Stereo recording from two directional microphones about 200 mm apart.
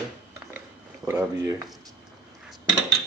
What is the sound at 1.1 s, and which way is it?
Speech, 10° right (ahead or behind).